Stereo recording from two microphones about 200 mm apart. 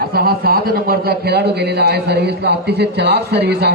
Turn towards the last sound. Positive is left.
turn(degrees=-55)  # may be behind; listen again after turning